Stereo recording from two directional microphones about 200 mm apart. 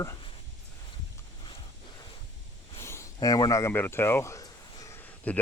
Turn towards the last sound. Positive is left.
turn(degrees=10)  # may be behind; listen again after turning